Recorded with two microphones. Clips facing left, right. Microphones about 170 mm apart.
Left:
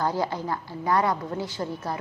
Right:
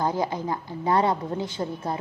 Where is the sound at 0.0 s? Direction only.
20° right (ahead or behind).